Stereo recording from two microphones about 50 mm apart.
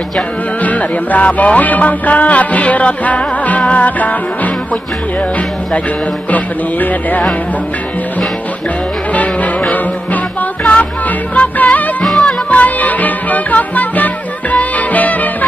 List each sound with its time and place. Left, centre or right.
0.6 s music: left
6.3 s music: left
9.1 s music: left
12.0 s music: centre
12.3 s music: left